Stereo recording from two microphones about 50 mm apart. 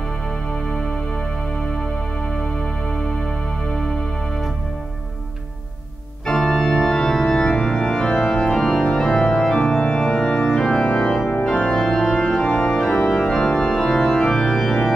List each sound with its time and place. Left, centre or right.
6.2 s organ: centre